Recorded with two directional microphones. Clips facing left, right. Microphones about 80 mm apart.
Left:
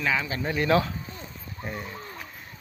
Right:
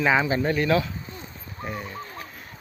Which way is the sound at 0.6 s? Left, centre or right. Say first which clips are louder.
Left 2 dB; left.